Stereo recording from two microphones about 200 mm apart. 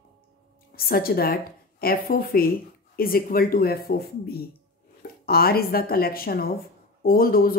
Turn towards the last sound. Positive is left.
turn(degrees=45)  # may be behind; listen again after turning